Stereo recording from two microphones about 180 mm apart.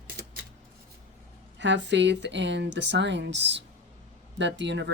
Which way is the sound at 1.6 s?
80° right.